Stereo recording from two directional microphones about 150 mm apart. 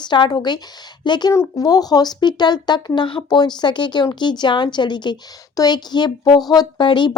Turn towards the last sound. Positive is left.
turn(degrees=30)  # may be behind; listen again after turning